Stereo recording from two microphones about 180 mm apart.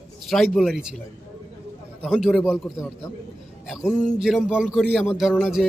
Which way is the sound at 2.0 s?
Centre (ahead or behind).